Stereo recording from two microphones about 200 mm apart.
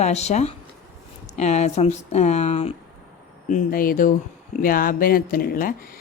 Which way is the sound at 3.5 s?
40° left (ahead or behind).